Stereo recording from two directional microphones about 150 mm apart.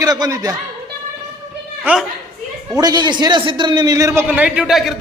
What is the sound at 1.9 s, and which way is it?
Speech, 10° right (ahead or behind).